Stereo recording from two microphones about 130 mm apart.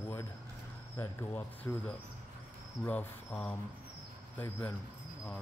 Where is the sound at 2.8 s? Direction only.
10° left (ahead or behind).